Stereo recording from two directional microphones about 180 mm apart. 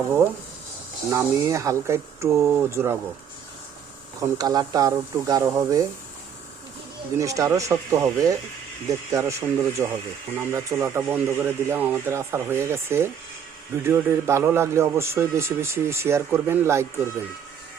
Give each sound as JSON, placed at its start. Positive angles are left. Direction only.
{"t": 1.1, "sound": "a man's voice", "side_deg": -15}
{"t": 4.2, "sound": "speech", "side_deg": -20}
{"t": 7.2, "sound": "a man's voice", "side_deg": -20}